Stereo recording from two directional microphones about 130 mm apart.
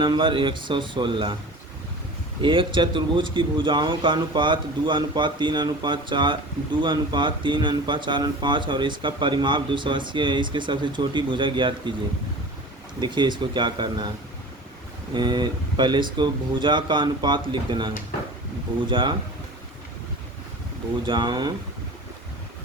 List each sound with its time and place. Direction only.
0.0 s speech: 35° right (ahead or behind)
2.4 s speech: 40° right (ahead or behind)
13.0 s speech: 35° right (ahead or behind)
15.1 s speech: 35° right (ahead or behind)
21.1 s speech: 35° right (ahead or behind)